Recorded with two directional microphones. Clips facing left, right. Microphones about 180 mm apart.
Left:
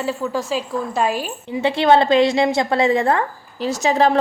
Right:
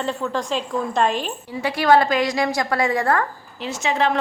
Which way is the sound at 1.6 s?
25° left (ahead or behind).